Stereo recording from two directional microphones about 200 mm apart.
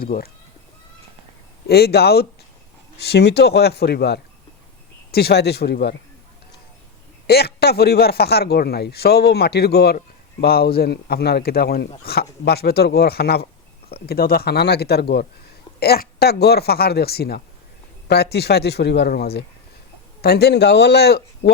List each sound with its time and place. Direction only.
0.0 s speech: 50° left (ahead or behind)
1.6 s speech: 55° left (ahead or behind)
7.3 s speech: 50° left (ahead or behind)